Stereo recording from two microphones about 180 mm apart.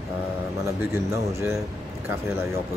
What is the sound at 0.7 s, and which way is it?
Speech, 15° right (ahead or behind).